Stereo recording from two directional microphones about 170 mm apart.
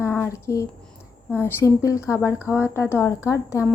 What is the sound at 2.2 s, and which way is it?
Speech, 10° right (ahead or behind).